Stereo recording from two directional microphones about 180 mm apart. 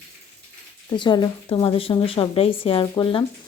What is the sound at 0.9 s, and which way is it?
A woman's voice, 25° left (ahead or behind).